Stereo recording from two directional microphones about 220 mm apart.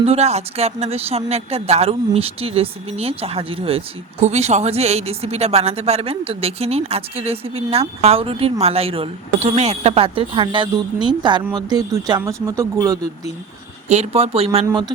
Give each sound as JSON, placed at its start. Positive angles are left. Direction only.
{"t": 0.0, "sound": "speech", "side_deg": -30}
{"t": 13.8, "sound": "speech", "side_deg": -30}